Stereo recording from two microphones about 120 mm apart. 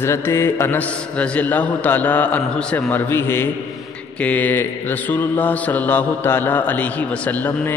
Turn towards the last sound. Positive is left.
turn(degrees=15)  # may be behind; listen again after turning